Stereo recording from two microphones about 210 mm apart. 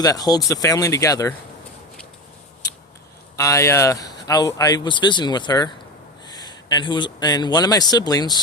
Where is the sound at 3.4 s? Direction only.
15° left (ahead or behind).